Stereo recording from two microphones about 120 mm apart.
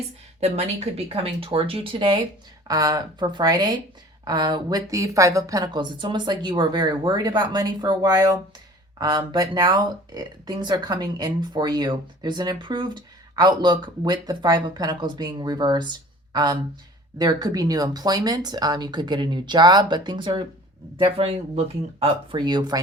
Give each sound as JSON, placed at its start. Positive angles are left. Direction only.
{"t": 0.3, "sound": "speech", "side_deg": -60}
{"t": 2.6, "sound": "speech", "side_deg": -30}